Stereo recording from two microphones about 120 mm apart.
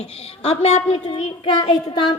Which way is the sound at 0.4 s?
55° left (ahead or behind).